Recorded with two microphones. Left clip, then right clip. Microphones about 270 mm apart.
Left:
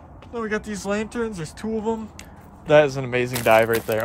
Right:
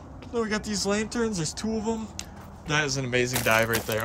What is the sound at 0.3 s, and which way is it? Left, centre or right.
Speech, centre.